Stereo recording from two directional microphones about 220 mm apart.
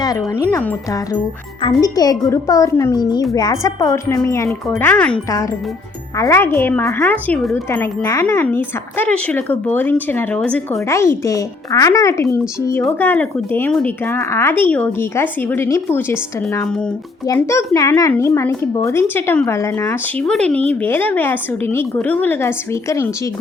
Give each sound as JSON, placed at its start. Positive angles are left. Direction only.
{"t": 0.0, "sound": "speech", "side_deg": 15}